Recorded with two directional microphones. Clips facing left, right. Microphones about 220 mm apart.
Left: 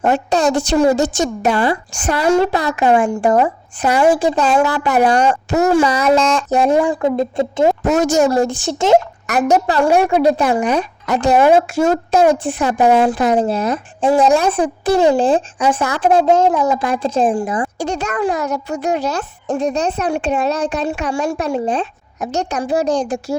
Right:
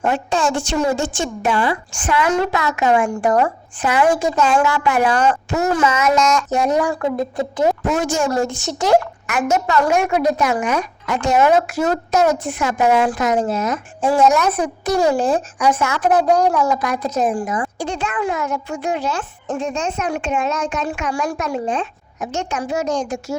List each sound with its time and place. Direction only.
0.0 s a woman's voice: 40° left (ahead or behind)
3.8 s a woman's voice: 40° left (ahead or behind); by 7.8 s 25° left (ahead or behind)
7.9 s a woman's voice: 40° left (ahead or behind); by 9.0 s 25° left (ahead or behind)
9.2 s a woman's voice: 35° left (ahead or behind)